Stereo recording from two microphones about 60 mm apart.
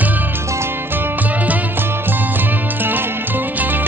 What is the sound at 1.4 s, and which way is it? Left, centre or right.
Music, right.